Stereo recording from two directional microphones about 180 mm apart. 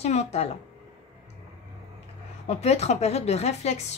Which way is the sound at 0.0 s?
35° left (ahead or behind).